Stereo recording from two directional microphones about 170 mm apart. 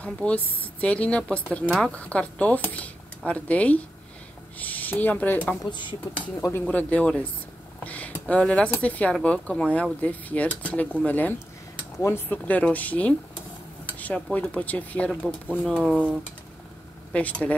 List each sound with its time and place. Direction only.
0.0 s speech: 10° left (ahead or behind)
5.6 s speech: 25° left (ahead or behind)
6.6 s speech: 10° left (ahead or behind)
17.1 s speech: 10° left (ahead or behind)